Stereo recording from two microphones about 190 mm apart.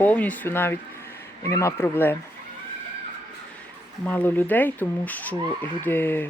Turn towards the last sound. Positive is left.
turn(degrees=10)  # may be behind; listen again after turning